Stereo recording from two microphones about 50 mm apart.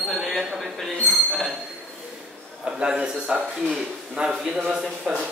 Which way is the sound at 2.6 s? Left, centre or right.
Centre.